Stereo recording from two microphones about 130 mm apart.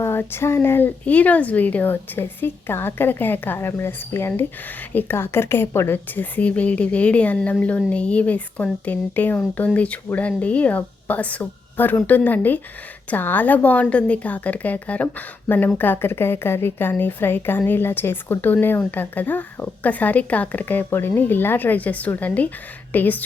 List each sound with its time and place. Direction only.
0.0 s a woman's voice: 20° left (ahead or behind)